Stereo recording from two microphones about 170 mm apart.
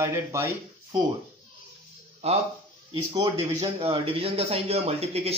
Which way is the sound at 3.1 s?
25° right (ahead or behind).